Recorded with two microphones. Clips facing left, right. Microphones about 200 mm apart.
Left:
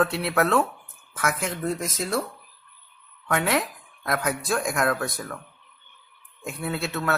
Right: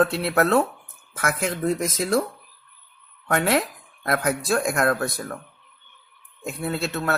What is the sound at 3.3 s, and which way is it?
Speech, 45° right (ahead or behind).